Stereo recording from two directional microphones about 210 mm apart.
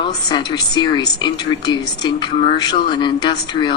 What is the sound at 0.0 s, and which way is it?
A woman's voice, 20° left (ahead or behind).